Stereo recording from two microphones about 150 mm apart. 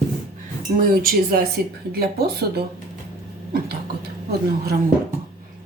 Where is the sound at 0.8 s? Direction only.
80° right.